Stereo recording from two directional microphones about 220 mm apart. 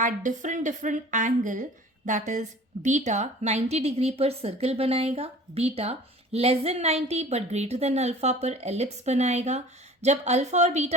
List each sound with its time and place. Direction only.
0.0 s a woman's voice: 35° right (ahead or behind)